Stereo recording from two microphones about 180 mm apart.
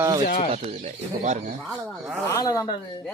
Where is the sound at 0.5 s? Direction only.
40° right (ahead or behind).